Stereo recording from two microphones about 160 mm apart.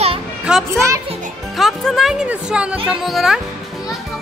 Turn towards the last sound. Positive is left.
turn(degrees=0)  # may be behind; listen again after turning